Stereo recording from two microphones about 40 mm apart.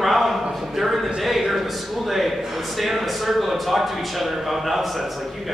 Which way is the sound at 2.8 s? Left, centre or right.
Centre.